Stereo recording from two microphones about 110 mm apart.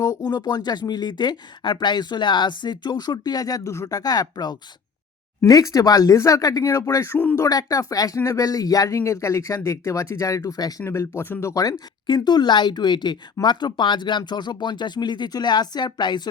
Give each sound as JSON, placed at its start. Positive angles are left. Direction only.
{"t": 0.0, "sound": "speech", "side_deg": 40}
{"t": 12.0, "sound": "speech", "side_deg": 40}